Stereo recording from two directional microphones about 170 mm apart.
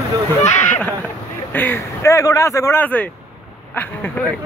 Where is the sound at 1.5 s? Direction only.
10° left (ahead or behind).